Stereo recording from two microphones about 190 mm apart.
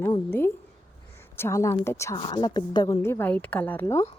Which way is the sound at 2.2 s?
25° left (ahead or behind).